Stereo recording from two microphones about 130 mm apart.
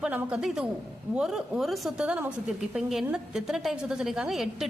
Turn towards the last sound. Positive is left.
turn(degrees=0)  # may be behind; listen again after turning